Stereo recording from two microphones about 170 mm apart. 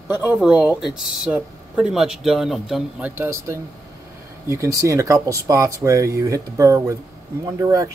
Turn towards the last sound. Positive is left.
turn(degrees=-20)  # may be behind; listen again after turning